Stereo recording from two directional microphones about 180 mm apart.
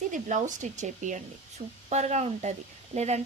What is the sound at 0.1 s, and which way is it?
Speech, 45° right (ahead or behind).